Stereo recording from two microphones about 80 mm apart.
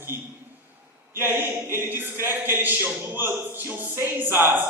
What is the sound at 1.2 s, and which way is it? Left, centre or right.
Speech, right.